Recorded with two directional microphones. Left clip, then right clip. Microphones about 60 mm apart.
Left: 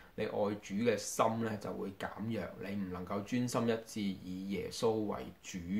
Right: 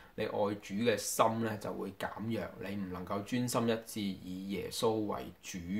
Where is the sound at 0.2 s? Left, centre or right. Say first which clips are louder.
Right 1 dB; centre.